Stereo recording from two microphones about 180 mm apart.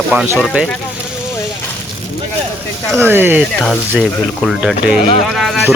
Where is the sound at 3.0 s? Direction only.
10° right (ahead or behind).